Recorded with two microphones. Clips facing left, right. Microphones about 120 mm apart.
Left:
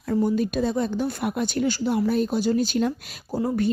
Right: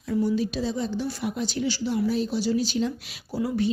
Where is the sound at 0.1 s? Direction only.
50° left (ahead or behind).